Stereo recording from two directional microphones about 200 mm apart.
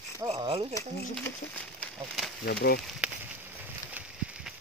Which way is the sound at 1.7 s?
Centre (ahead or behind).